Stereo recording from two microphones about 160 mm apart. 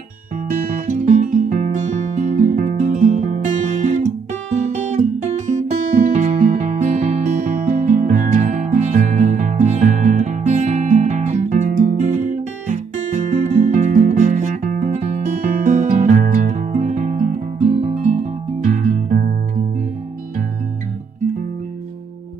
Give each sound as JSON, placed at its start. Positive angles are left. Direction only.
{"t": 0.5, "sound": "music", "side_deg": -55}
{"t": 4.6, "sound": "guitar", "side_deg": -50}